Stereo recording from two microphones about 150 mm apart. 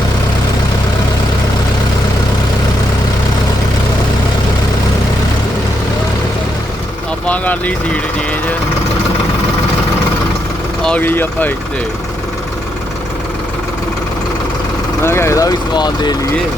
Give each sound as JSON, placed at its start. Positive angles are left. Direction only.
{"t": 7.3, "sound": "speech", "side_deg": 10}
{"t": 10.8, "sound": "speech", "side_deg": 10}
{"t": 15.0, "sound": "speech", "side_deg": 15}